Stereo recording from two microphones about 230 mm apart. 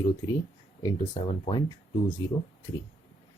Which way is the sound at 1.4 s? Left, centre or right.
Left.